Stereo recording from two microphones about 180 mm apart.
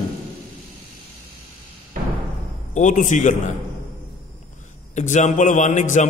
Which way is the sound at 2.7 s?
45° left (ahead or behind).